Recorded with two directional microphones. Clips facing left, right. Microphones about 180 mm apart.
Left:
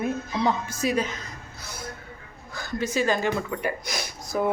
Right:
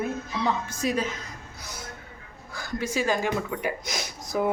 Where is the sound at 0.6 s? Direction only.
Centre (ahead or behind).